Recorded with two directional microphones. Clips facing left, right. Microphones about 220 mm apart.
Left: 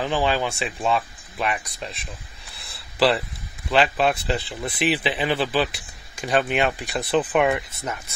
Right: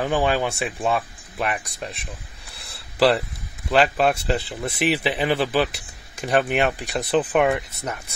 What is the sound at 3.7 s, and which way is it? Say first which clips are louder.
Speech: right 1 dB; 45° right (ahead or behind).